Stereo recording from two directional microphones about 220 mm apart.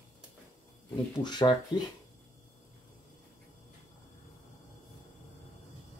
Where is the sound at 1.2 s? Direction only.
20° left (ahead or behind).